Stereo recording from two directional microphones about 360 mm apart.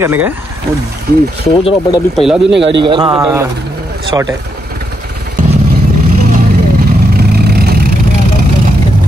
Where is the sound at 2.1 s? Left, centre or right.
Centre.